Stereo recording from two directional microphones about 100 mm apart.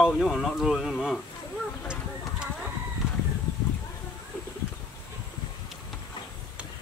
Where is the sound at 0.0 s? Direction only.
5° right (ahead or behind).